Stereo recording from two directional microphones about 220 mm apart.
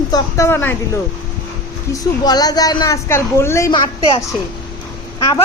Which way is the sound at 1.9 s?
15° left (ahead or behind).